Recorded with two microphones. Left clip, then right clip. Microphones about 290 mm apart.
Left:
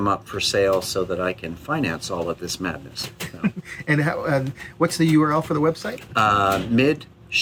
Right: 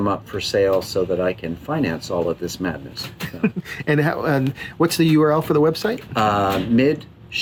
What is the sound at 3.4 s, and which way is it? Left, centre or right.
Speech, right.